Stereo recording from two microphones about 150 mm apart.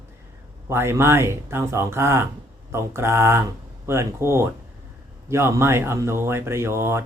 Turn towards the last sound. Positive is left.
turn(degrees=-15)  # may be behind; listen again after turning